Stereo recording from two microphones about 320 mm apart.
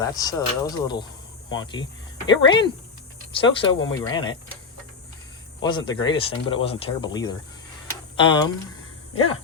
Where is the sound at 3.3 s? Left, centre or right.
Centre.